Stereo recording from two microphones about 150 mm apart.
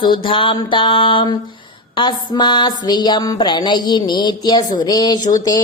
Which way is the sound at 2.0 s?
30° left (ahead or behind).